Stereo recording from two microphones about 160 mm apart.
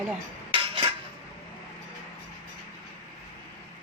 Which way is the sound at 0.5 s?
35° right (ahead or behind).